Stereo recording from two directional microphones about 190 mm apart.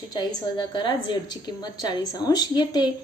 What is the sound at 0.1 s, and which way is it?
A woman's voice, 20° left (ahead or behind).